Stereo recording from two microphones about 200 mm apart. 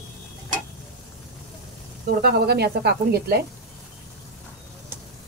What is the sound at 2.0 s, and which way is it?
A woman's voice, 50° right (ahead or behind).